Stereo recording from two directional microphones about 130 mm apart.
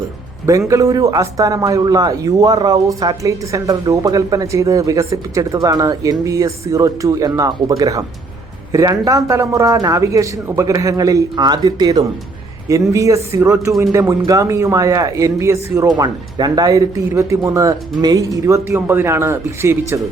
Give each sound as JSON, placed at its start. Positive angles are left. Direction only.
{"t": 0.7, "sound": "a man's voice", "side_deg": -25}